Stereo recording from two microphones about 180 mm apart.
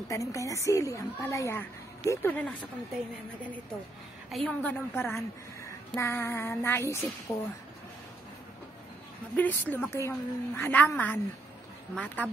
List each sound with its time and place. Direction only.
0.1 s a woman's voice: 15° left (ahead or behind)
4.3 s a woman's voice: 5° left (ahead or behind)
9.4 s a woman's voice: 10° left (ahead or behind)